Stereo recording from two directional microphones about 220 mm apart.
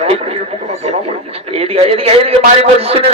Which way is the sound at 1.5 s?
25° right (ahead or behind).